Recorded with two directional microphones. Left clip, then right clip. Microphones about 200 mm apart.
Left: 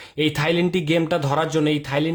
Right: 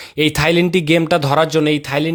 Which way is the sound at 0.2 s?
35° right (ahead or behind).